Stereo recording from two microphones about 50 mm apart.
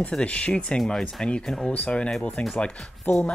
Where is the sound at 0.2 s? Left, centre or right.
Left.